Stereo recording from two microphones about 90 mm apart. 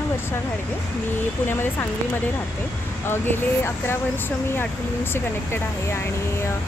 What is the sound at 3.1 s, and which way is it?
Speech, 25° left (ahead or behind).